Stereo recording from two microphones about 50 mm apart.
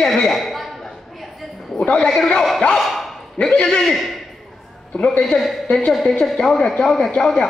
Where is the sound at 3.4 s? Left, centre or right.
Left.